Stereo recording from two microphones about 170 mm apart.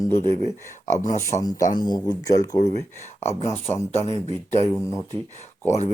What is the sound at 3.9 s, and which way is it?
Speech, 40° left (ahead or behind).